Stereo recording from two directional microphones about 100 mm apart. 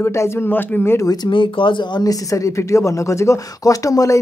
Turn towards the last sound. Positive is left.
turn(degrees=35)  # may be behind; listen again after turning